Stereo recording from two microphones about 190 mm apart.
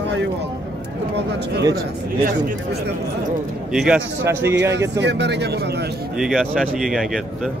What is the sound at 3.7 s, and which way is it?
Speech, centre (ahead or behind).